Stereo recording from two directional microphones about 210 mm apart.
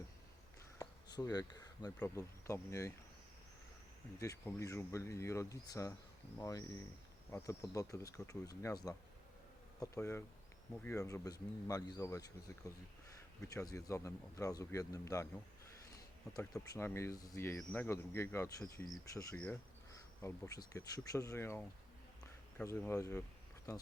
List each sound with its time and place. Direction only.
1.1 s speech: 20° left (ahead or behind)
4.2 s speech: 15° left (ahead or behind)
16.3 s speech: 15° left (ahead or behind)